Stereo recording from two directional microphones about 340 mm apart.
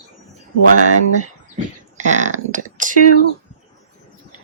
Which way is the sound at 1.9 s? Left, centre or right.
Right.